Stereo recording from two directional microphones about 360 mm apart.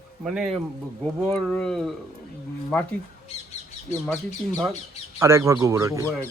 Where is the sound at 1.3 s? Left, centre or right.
Centre.